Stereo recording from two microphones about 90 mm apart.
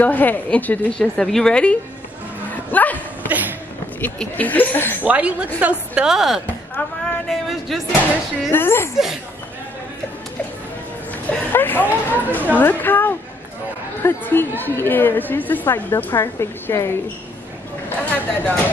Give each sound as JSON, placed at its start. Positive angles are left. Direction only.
{"t": 0.0, "sound": "a woman's voice", "side_deg": 20}
{"t": 0.9, "sound": "a woman's voice", "side_deg": 5}
{"t": 2.5, "sound": "bow-wow", "side_deg": 20}
{"t": 3.3, "sound": "a sound", "side_deg": -20}
{"t": 4.2, "sound": "a woman's voice", "side_deg": 20}
{"t": 5.0, "sound": "speech", "side_deg": -15}
{"t": 7.2, "sound": "a sound", "side_deg": 0}
{"t": 8.1, "sound": "a woman's voice", "side_deg": 25}
{"t": 8.9, "sound": "a sound", "side_deg": -5}
{"t": 11.2, "sound": "a woman's voice", "side_deg": 20}
{"t": 17.8, "sound": "a woman's voice", "side_deg": 20}